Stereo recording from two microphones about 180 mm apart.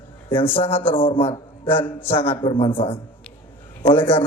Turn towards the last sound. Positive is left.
turn(degrees=10)  # may be behind; listen again after turning